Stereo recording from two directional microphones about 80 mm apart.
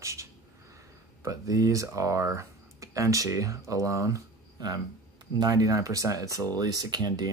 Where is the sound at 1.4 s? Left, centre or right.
Right.